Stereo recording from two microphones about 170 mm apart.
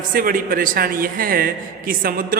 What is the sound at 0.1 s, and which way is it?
A man's voice, 55° right (ahead or behind).